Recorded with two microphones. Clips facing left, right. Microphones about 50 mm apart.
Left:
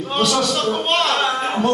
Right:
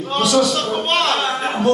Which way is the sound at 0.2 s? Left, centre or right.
Centre.